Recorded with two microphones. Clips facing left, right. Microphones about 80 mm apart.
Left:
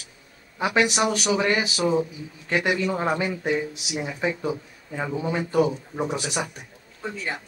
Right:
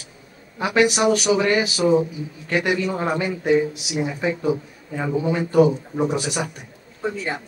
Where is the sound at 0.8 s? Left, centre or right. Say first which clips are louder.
Right 5 dB; centre.